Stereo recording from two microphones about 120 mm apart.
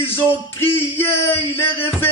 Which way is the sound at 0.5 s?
15° left (ahead or behind).